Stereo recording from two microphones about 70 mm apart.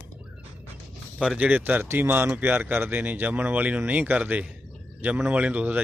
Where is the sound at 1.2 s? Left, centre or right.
Centre.